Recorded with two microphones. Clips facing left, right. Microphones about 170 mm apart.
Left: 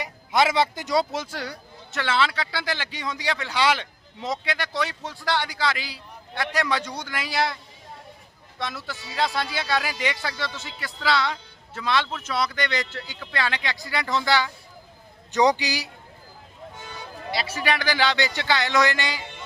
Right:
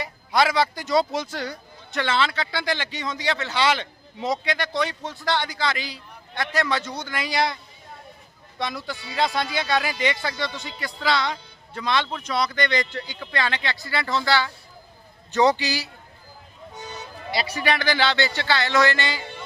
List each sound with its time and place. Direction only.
0.0 s speech: 20° left (ahead or behind)
0.9 s speech: 5° left (ahead or behind)
17.3 s speech: 5° left (ahead or behind)